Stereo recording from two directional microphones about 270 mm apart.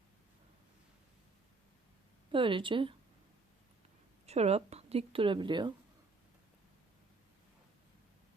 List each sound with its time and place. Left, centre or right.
2.3 s a woman's voice: centre
4.3 s a woman's voice: right